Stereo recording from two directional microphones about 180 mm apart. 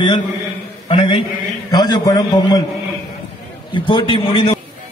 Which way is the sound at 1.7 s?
20° left (ahead or behind).